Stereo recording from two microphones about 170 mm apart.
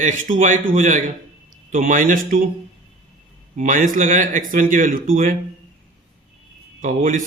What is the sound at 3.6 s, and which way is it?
A man's voice, 50° right (ahead or behind).